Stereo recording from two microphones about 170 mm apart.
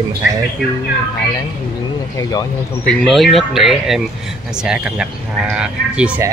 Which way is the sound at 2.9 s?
5° left (ahead or behind).